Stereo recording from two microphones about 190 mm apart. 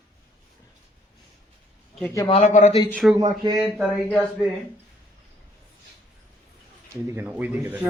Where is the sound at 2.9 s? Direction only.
Centre (ahead or behind).